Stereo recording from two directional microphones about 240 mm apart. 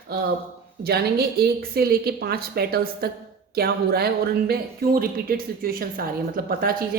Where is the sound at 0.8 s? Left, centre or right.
Right.